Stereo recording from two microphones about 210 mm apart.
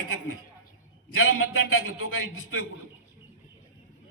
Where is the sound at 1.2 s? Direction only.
75° left (ahead or behind).